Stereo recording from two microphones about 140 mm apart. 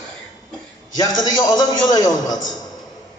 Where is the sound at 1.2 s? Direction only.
30° left (ahead or behind).